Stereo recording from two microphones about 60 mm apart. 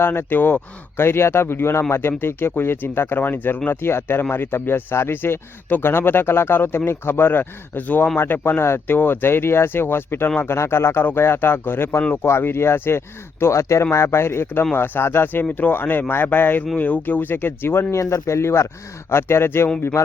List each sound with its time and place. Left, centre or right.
0.0 s speech: left
13.4 s speech: left
17.9 s speech: left